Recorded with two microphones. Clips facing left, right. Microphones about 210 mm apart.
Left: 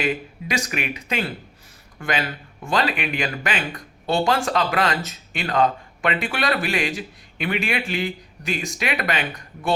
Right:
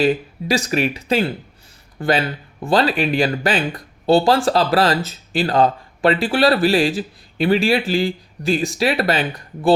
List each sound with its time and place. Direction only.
0.0 s speech: 30° right (ahead or behind)